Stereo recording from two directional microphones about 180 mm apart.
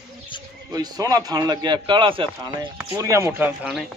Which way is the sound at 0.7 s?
20° right (ahead or behind).